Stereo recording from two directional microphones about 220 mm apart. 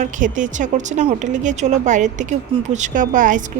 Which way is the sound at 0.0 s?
35° right (ahead or behind).